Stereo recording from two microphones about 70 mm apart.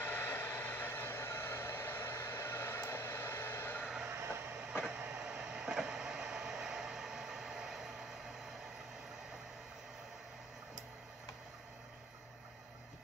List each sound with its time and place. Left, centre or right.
0.1 s a sound: left
4.1 s vehicle: right
4.8 s train: centre